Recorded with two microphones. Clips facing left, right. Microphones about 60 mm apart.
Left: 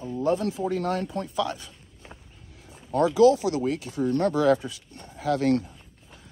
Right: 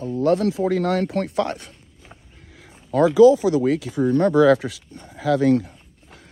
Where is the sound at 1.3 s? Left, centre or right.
Right.